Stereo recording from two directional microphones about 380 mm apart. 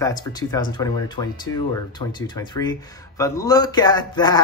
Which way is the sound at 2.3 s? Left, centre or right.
Centre.